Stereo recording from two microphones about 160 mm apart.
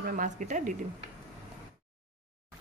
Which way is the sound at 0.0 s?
55° right (ahead or behind).